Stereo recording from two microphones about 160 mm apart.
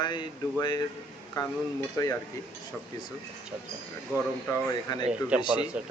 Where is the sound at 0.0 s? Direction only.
30° left (ahead or behind).